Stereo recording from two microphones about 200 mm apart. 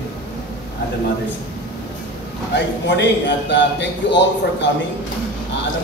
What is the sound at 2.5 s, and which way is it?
Speech, 60° left (ahead or behind).